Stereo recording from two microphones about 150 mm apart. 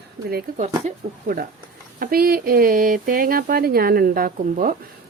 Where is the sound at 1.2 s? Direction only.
70° right (ahead or behind).